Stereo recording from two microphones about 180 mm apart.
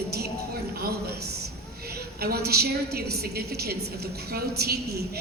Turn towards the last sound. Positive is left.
turn(degrees=-60)  # may be behind; listen again after turning